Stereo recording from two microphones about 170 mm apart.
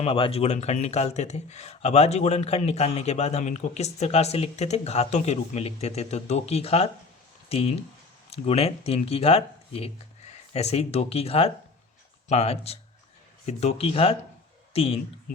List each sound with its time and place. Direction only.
0.0 s speech: 35° left (ahead or behind)